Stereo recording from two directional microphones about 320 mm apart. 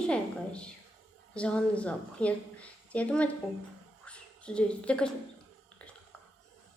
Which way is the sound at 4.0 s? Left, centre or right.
Centre.